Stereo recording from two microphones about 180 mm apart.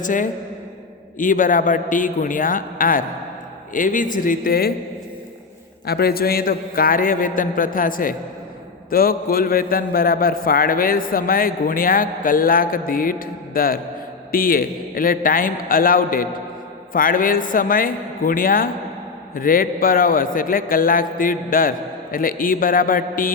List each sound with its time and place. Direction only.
0.0 s a man's voice: 45° left (ahead or behind)
5.8 s a man's voice: 60° left (ahead or behind)